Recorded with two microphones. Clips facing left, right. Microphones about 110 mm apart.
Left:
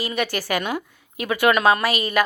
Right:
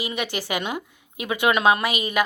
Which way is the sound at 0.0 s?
20° right (ahead or behind).